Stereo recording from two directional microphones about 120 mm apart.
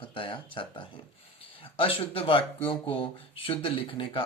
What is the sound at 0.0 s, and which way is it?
Speech, 45° left (ahead or behind).